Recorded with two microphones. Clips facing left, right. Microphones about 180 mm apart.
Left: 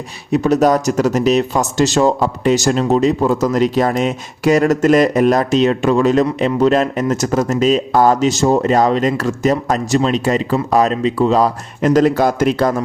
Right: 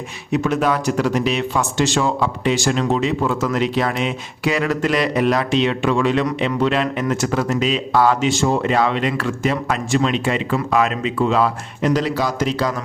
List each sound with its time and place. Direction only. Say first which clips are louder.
0.3 s speech: left 6 dB; 35° left (ahead or behind); by 12.7 s 55° left (ahead or behind)